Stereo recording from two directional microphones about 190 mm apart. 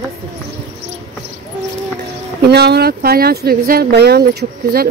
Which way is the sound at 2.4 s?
60° right (ahead or behind).